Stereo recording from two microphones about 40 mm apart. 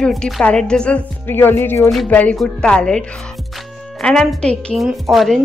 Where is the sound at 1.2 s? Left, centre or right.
Left.